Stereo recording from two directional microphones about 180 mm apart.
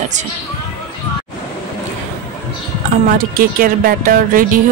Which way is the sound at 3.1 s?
50° right (ahead or behind).